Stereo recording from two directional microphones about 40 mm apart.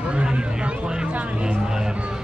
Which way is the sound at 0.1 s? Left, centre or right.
Right.